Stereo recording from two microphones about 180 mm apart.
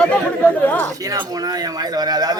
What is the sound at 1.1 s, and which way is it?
A man's voice, 20° right (ahead or behind).